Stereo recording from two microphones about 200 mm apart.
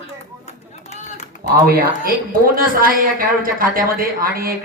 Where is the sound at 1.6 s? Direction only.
45° right (ahead or behind).